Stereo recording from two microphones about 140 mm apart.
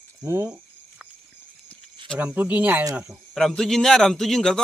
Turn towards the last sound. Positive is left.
turn(degrees=5)  # may be behind; listen again after turning